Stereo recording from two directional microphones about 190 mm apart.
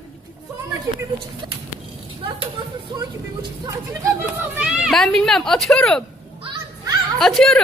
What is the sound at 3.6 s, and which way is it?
Speech, 15° right (ahead or behind).